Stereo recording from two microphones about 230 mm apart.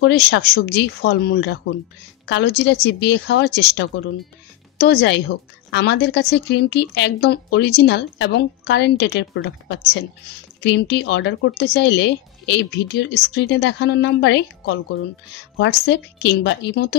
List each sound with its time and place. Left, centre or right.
0.0 s speech: left